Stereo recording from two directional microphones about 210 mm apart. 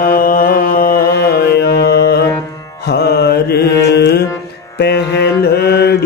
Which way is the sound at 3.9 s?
50° left (ahead or behind).